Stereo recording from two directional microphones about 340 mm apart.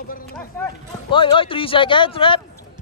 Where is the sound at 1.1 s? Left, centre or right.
Centre.